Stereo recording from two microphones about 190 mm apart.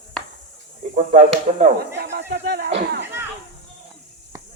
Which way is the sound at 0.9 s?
35° right (ahead or behind).